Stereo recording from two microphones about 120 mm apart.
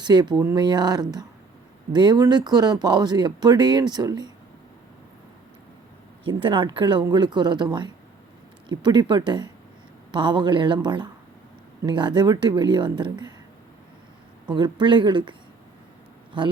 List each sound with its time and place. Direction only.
0.0 s speech: 35° right (ahead or behind)
6.2 s speech: 45° right (ahead or behind)
14.5 s speech: 40° right (ahead or behind)